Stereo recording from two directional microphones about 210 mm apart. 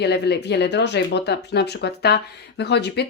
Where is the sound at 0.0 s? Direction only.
50° left (ahead or behind).